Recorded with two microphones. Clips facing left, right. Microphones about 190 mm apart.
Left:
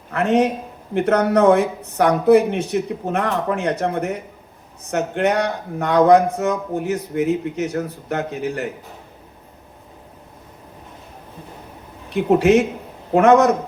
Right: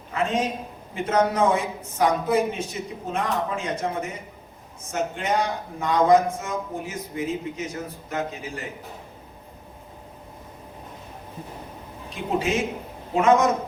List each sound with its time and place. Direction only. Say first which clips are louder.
0.1 s a man's voice: left 7 dB; 65° left (ahead or behind)
12.1 s speech: left 11 dB; 65° left (ahead or behind)